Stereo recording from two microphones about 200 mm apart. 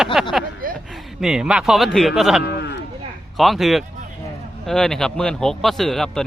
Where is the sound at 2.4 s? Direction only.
60° left (ahead or behind).